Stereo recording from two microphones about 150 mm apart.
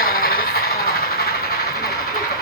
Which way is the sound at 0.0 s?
70° left (ahead or behind).